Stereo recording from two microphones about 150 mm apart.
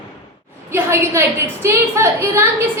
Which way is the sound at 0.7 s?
15° right (ahead or behind).